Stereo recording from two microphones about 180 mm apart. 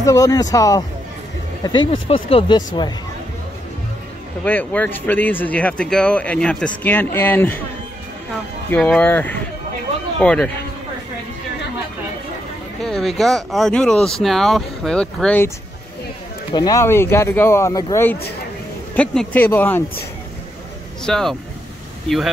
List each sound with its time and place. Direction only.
0.0 s speech: 20° left (ahead or behind)
4.5 s speech: 10° left (ahead or behind)
8.6 s speech: 10° left (ahead or behind)
12.8 s speech: centre (ahead or behind)
16.5 s speech: 20° left (ahead or behind)
21.0 s speech: 5° left (ahead or behind)